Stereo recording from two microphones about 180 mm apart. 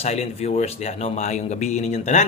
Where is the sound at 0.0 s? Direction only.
35° left (ahead or behind).